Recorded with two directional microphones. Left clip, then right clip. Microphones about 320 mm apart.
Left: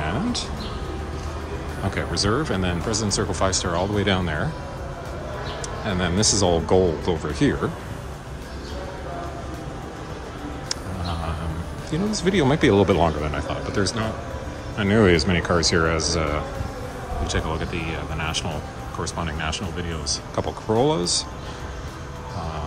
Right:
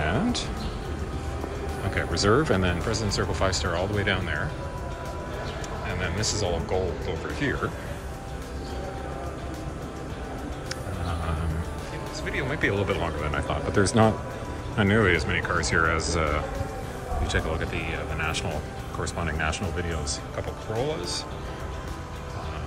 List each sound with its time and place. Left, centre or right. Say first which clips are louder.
0.0 s music: left 1 dB; centre
2.0 s speech: right 1 dB; centre
5.9 s speech: left 8 dB; centre
12.1 s speech: left 9 dB; left; by 14.1 s centre
14.8 s speech: left 4 dB; centre
20.8 s speech: left 7 dB; centre